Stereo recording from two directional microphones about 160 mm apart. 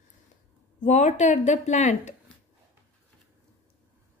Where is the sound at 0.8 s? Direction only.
45° left (ahead or behind).